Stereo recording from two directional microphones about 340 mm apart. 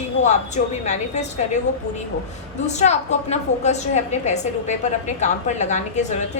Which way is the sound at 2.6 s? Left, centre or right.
Centre.